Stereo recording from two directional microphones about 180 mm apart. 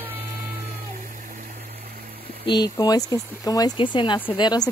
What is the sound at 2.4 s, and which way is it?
Speech, 25° left (ahead or behind).